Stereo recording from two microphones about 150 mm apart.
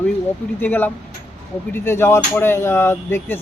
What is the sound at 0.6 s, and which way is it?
Speech, 10° left (ahead or behind).